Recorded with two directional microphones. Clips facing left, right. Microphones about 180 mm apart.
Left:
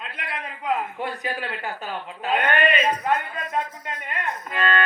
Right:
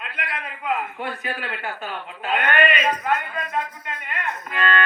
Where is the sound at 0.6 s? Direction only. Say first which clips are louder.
Left 1 dB; 35° left (ahead or behind).